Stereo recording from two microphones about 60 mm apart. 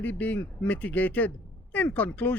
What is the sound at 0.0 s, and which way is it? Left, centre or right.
Speech, left.